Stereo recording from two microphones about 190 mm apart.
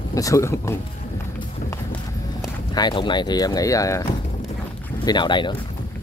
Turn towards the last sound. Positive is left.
turn(degrees=25)  # may be behind; listen again after turning